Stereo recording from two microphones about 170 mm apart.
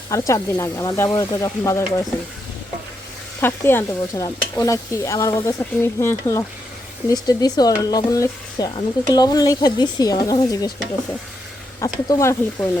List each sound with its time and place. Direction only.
0.1 s speech: 20° left (ahead or behind)
3.4 s speech: 15° left (ahead or behind)
11.8 s speech: 20° left (ahead or behind)